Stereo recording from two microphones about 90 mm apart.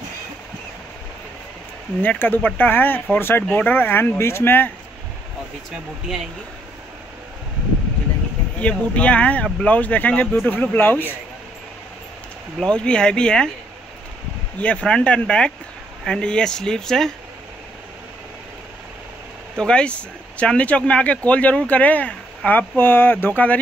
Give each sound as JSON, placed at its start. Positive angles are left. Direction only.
{"t": 2.0, "sound": "speech", "side_deg": 20}
{"t": 8.5, "sound": "speech", "side_deg": 15}
{"t": 12.5, "sound": "speech", "side_deg": 10}
{"t": 14.6, "sound": "speech", "side_deg": 10}
{"t": 19.6, "sound": "speech", "side_deg": 10}